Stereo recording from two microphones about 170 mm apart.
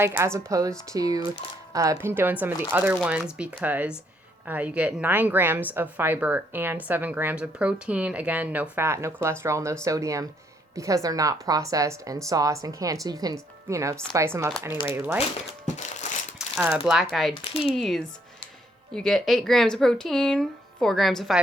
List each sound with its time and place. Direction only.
0.0 s a woman's voice: 15° right (ahead or behind)
16.6 s speech: 10° right (ahead or behind)
17.5 s speech: 35° left (ahead or behind)
17.7 s speech: centre (ahead or behind)